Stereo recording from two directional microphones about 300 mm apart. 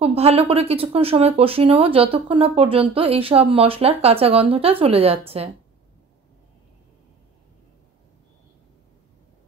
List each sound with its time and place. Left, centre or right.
0.0 s speech: centre